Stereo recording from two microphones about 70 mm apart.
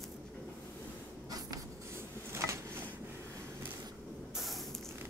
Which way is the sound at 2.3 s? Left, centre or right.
Right.